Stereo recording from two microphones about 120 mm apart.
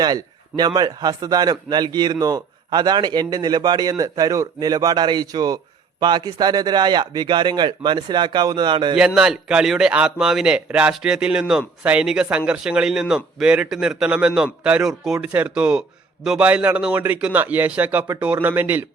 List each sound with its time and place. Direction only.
0.0 s a man's voice: 35° right (ahead or behind)
9.0 s a man's voice: 5° right (ahead or behind)